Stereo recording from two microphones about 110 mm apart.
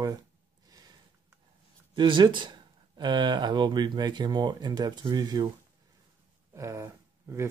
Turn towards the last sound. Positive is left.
turn(degrees=-25)  # may be behind; listen again after turning